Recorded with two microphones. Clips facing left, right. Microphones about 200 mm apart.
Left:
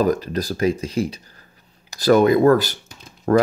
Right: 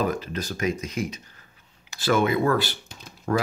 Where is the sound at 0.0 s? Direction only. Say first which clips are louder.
Left 7 dB; 40° left (ahead or behind).